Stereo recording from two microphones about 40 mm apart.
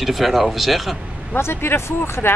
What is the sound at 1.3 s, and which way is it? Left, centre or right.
Speech, left.